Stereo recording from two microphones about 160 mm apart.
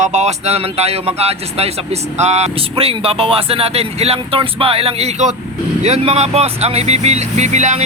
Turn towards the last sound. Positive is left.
turn(degrees=-45)  # may be behind; listen again after turning